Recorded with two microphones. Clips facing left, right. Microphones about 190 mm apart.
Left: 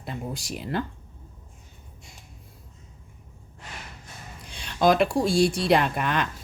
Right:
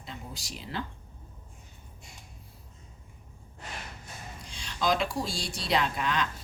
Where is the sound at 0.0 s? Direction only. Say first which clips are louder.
Left 9 dB; 55° left (ahead or behind).